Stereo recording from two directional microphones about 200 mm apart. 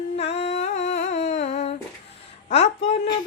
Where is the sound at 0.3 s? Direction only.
30° left (ahead or behind).